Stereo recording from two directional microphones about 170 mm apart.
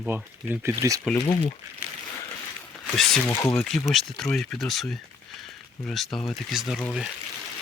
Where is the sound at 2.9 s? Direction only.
Centre (ahead or behind).